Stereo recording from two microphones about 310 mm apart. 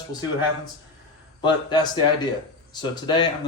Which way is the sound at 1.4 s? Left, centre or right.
Centre.